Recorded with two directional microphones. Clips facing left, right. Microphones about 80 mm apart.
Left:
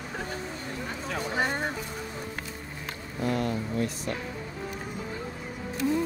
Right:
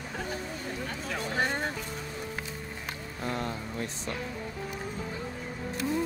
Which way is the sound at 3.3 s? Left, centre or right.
Right.